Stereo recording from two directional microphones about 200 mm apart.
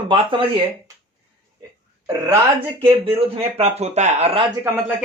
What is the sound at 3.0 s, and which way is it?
Speech, 30° right (ahead or behind).